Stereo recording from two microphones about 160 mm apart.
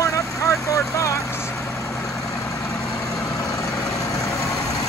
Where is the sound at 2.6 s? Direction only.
20° left (ahead or behind).